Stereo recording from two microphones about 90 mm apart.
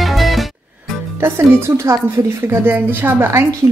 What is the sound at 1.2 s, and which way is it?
A woman's voice, 30° right (ahead or behind).